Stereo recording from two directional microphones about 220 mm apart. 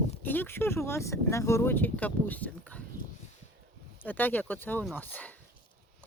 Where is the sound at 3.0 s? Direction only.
40° left (ahead or behind).